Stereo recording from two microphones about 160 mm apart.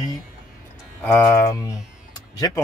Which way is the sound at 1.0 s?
15° left (ahead or behind).